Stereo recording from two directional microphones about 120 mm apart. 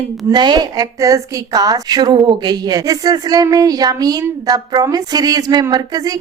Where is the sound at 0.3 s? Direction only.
35° right (ahead or behind).